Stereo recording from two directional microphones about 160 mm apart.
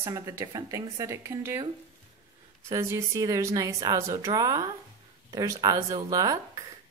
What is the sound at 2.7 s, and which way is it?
A woman's voice, 20° right (ahead or behind).